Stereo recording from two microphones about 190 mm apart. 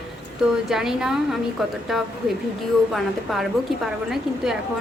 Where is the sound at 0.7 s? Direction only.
5° right (ahead or behind).